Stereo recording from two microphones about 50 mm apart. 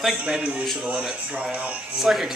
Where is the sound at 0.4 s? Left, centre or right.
Right.